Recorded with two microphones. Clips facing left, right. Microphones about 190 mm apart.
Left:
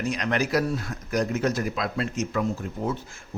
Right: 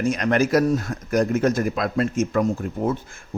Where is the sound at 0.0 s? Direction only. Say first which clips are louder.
Right 6 dB; 50° right (ahead or behind).